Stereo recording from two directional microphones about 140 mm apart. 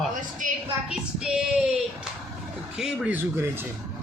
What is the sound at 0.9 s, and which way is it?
Female singing, 5° right (ahead or behind).